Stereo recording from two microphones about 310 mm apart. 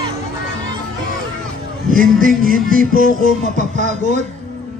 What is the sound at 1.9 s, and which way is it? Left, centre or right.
A man's voice, right.